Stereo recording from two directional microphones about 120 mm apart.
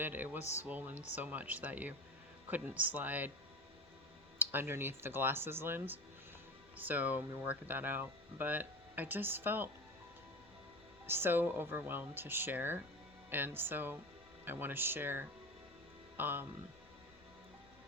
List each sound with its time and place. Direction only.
0.0 s speech: 15° right (ahead or behind)
4.4 s speech: 20° right (ahead or behind)
11.0 s speech: 20° right (ahead or behind)